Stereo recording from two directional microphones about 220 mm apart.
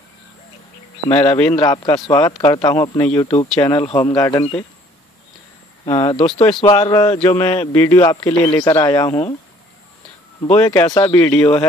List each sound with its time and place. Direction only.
1.1 s speech: 5° left (ahead or behind)
1.5 s speech: 20° left (ahead or behind)
3.6 s speech: 15° left (ahead or behind)
5.9 s speech: 20° left (ahead or behind)
7.3 s speech: 10° left (ahead or behind)
10.5 s speech: 10° left (ahead or behind)